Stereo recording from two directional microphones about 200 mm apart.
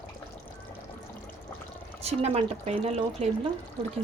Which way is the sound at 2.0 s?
30° right (ahead or behind).